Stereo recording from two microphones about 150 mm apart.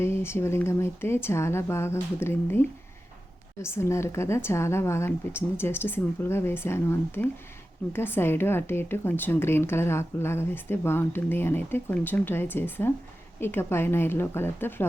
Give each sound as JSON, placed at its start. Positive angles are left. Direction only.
{"t": 0.0, "sound": "a woman's voice", "side_deg": 15}